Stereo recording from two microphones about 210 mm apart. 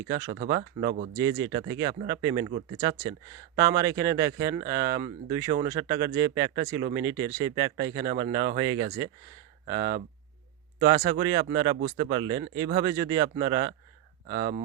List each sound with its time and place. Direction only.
0.0 s speech: 20° right (ahead or behind)
0.3 s speech: 40° right (ahead or behind)
1.1 s speech: 15° right (ahead or behind)